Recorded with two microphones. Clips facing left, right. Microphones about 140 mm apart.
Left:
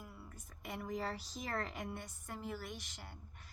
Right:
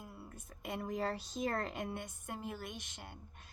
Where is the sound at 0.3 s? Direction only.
25° right (ahead or behind).